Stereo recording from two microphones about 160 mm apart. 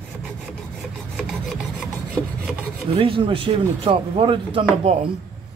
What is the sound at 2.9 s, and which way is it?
Speech, 35° right (ahead or behind).